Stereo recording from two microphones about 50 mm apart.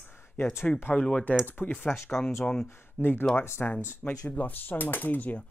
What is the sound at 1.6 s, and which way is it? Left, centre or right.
Speech, left.